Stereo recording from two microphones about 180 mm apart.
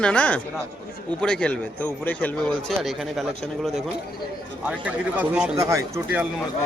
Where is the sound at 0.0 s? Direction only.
5° left (ahead or behind).